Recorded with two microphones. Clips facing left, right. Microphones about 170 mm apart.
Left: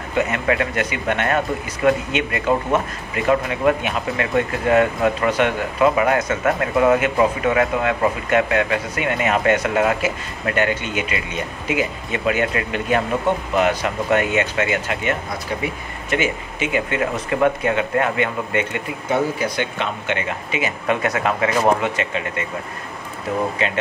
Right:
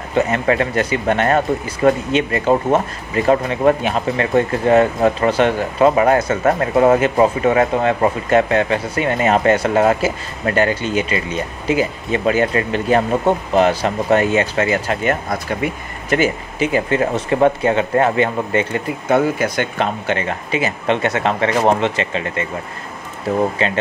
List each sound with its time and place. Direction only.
0.1 s speech: 30° right (ahead or behind)
19.0 s speech: 50° right (ahead or behind); by 22.2 s 30° right (ahead or behind)
23.6 s speech: 35° right (ahead or behind)